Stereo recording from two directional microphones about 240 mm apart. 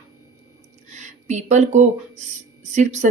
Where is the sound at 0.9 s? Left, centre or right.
Right.